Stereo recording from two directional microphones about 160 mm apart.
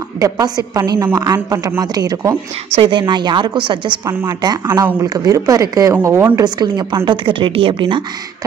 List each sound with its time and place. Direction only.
0.2 s a woman's voice: 25° right (ahead or behind)
4.1 s speech: 15° right (ahead or behind)
4.4 s a woman's voice: 25° right (ahead or behind)